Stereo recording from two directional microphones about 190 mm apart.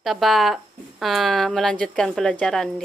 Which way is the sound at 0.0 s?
Centre (ahead or behind).